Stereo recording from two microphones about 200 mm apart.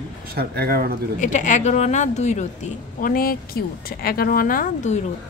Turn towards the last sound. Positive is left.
turn(degrees=40)  # may be behind; listen again after turning